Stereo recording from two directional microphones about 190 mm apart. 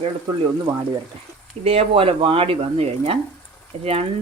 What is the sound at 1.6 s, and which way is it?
Speech, 30° right (ahead or behind).